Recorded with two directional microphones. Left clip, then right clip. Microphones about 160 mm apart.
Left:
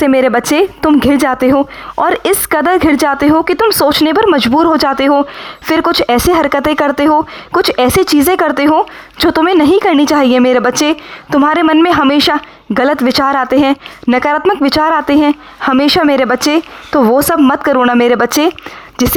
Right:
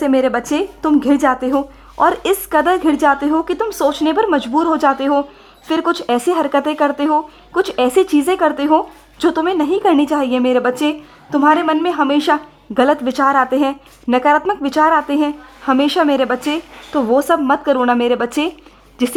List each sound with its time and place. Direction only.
0.0 s speech: 35° left (ahead or behind)